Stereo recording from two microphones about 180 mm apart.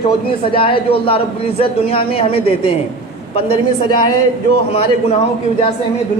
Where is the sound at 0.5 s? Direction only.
30° left (ahead or behind).